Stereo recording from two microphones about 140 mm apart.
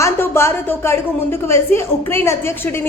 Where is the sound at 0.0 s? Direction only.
20° left (ahead or behind).